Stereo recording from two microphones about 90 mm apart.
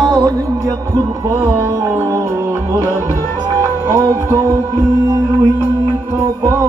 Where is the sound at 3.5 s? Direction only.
45° right (ahead or behind).